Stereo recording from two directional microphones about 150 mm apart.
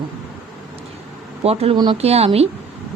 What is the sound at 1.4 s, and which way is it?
Speech, 40° right (ahead or behind).